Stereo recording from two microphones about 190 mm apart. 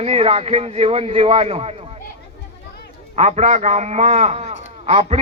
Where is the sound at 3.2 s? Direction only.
35° right (ahead or behind).